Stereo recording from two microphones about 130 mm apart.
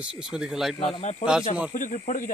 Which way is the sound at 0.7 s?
50° left (ahead or behind).